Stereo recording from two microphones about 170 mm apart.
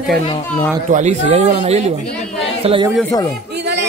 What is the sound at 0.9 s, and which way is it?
Speech, 45° right (ahead or behind).